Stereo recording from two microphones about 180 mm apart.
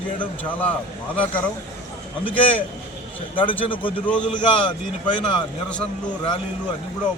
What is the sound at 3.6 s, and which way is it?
A man's voice, 30° left (ahead or behind).